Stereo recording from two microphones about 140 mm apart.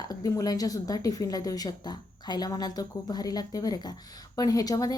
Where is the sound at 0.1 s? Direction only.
25° left (ahead or behind).